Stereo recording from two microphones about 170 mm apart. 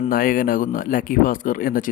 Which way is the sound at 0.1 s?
55° left (ahead or behind).